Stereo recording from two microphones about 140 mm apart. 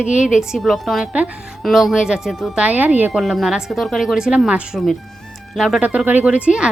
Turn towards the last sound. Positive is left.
turn(degrees=-5)  # may be behind; listen again after turning